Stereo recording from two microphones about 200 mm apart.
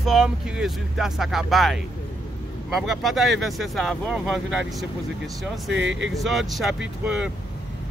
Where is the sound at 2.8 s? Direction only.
Centre (ahead or behind).